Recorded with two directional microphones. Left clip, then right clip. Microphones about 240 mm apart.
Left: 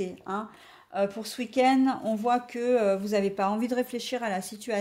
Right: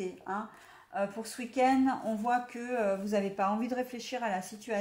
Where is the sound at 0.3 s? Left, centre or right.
Left.